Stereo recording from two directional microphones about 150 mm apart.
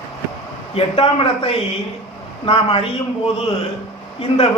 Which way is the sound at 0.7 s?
40° left (ahead or behind).